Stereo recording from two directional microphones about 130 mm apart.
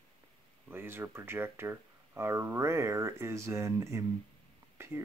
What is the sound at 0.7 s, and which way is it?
Speech, 15° right (ahead or behind).